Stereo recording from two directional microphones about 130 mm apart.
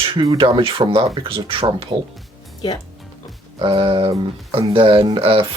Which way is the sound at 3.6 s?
40° right (ahead or behind).